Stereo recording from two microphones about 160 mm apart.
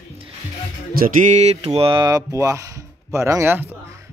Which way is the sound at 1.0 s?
50° right (ahead or behind).